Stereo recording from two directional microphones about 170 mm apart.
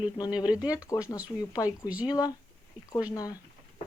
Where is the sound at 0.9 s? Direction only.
20° left (ahead or behind).